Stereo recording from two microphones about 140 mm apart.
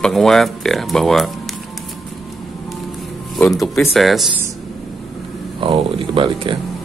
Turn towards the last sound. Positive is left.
turn(degrees=-40)  # may be behind; listen again after turning